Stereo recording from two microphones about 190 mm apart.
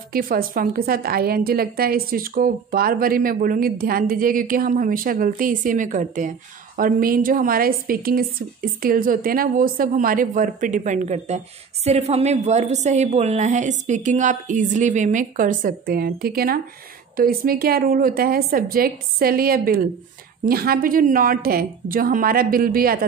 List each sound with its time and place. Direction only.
0.1 s a woman's voice: 50° right (ahead or behind)